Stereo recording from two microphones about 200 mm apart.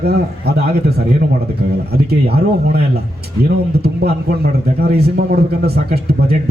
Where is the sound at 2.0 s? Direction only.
50° right (ahead or behind).